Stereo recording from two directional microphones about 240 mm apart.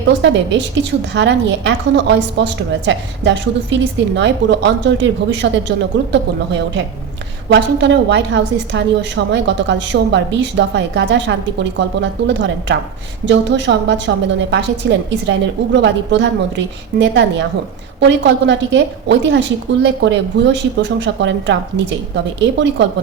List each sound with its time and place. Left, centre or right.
0.2 s a woman's voice: right